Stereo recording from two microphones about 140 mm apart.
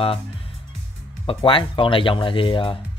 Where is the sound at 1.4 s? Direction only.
40° left (ahead or behind).